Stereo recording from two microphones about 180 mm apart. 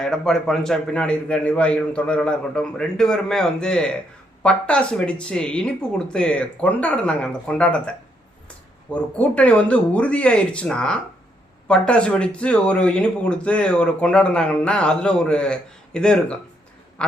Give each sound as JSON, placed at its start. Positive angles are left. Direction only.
{"t": 0.0, "sound": "speech", "side_deg": 0}